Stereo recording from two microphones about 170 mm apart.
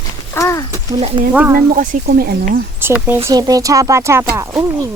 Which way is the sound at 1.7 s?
50° right (ahead or behind).